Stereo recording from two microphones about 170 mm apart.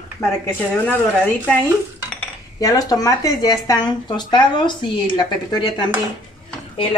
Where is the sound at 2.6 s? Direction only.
20° left (ahead or behind).